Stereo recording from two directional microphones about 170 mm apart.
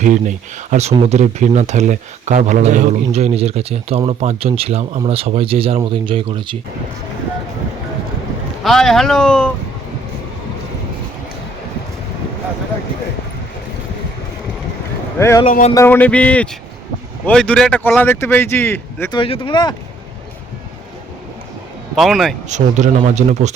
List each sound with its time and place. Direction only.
0.0 s speech: 45° right (ahead or behind); by 6.6 s 30° right (ahead or behind)
8.6 s speech: centre (ahead or behind)
15.2 s speech: 15° left (ahead or behind)
15.4 s speech: 45° left (ahead or behind)
15.7 s speech: 15° left (ahead or behind)
19.1 s speech: 30° left (ahead or behind)
21.9 s speech: centre (ahead or behind)
22.4 s a man's voice: 45° right (ahead or behind)